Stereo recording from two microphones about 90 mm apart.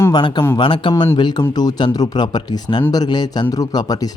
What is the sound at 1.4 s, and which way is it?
Speech, 50° left (ahead or behind).